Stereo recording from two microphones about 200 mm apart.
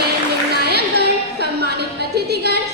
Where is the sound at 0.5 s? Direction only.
55° right (ahead or behind).